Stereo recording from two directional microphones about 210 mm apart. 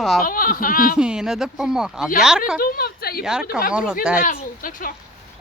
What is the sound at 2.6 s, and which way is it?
Speech, 45° left (ahead or behind).